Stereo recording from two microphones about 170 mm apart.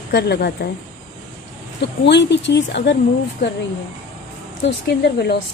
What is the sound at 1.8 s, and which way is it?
Speech, 90° left.